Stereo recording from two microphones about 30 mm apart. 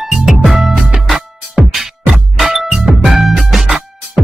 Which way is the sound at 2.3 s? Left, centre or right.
Centre.